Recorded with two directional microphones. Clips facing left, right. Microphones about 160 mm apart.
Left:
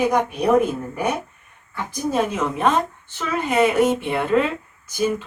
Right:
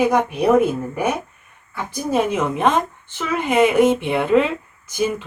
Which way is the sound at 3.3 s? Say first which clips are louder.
Right 2 dB; 15° right (ahead or behind).